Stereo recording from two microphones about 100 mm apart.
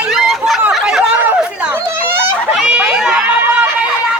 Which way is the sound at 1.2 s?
20° right (ahead or behind).